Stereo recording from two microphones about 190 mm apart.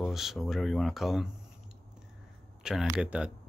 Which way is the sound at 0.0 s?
Centre (ahead or behind).